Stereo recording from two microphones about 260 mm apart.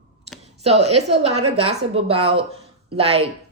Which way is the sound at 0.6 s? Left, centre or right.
Right.